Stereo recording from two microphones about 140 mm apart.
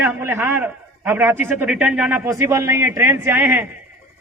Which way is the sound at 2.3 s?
20° right (ahead or behind).